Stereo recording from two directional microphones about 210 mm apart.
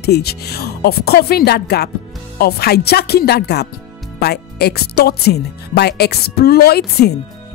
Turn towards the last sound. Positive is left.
turn(degrees=50)  # may be behind; listen again after turning